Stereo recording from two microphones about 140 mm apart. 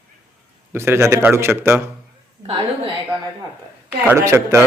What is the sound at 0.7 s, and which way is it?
Speech, 20° right (ahead or behind).